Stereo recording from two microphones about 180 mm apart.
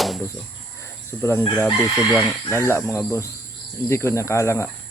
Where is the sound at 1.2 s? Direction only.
15° left (ahead or behind).